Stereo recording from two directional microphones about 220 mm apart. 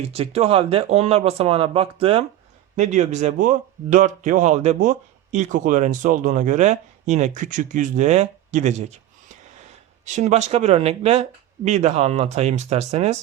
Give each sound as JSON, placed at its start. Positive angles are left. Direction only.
{"t": 0.1, "sound": "speech", "side_deg": -25}
{"t": 10.1, "sound": "speech", "side_deg": -30}